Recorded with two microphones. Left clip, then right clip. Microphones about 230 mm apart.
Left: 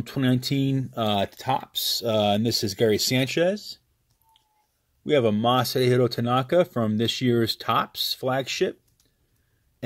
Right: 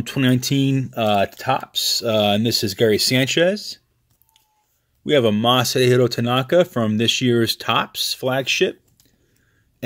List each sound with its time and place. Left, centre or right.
0.0 s speech: centre
5.0 s speech: centre